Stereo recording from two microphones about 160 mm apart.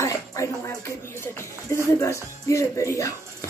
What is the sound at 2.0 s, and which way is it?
Speech, 15° left (ahead or behind).